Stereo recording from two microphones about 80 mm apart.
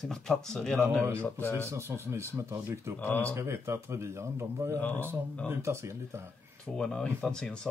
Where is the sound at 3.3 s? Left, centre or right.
Right.